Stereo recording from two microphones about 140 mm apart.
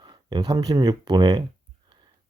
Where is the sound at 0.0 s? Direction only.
30° right (ahead or behind).